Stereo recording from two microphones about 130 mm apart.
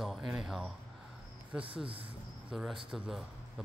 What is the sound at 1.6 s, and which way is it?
Speech, 45° right (ahead or behind).